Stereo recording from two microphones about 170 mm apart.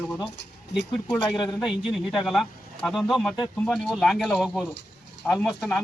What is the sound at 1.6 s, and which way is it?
A man's voice, 5° right (ahead or behind).